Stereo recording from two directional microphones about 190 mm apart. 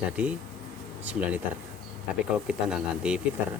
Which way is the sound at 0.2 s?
5° right (ahead or behind).